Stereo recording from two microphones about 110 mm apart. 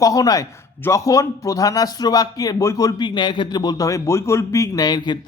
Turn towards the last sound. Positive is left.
turn(degrees=40)  # may be behind; listen again after turning